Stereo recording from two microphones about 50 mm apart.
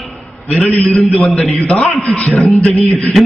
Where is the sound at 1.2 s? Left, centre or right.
Left.